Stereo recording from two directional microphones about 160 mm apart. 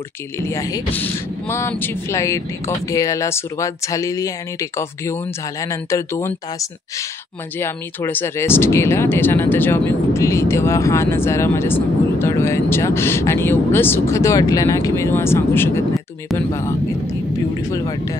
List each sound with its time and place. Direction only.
0.4 s speech: 20° left (ahead or behind)
17.6 s speech: 20° left (ahead or behind)